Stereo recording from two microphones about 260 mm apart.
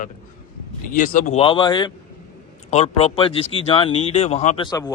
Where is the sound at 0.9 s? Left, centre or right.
Left.